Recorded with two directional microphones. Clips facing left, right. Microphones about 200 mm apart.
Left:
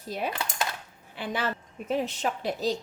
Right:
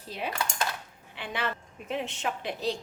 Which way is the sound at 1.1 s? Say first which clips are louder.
Left 3 dB; 40° left (ahead or behind).